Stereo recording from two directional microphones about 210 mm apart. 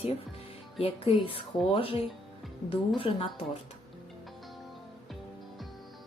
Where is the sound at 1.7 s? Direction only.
25° left (ahead or behind).